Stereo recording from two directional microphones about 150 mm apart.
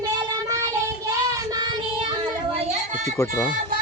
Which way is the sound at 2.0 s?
40° right (ahead or behind).